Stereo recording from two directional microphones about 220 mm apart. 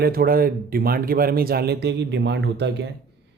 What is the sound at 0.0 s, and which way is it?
Speech, 45° right (ahead or behind).